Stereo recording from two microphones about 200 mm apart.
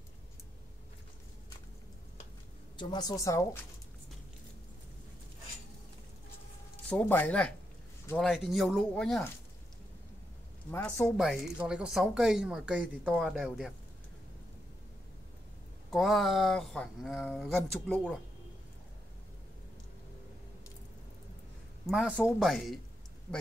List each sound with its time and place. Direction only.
2.8 s a woman's voice: 20° left (ahead or behind)
6.9 s speech: 10° left (ahead or behind)
10.7 s speech: 10° left (ahead or behind)
11.1 s speech: centre (ahead or behind)
15.9 s speech: centre (ahead or behind)
21.8 s speech: centre (ahead or behind)